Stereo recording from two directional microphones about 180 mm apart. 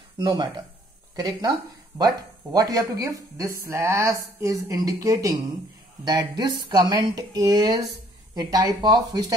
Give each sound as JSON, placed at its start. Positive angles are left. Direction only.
{"t": 0.2, "sound": "speech", "side_deg": -25}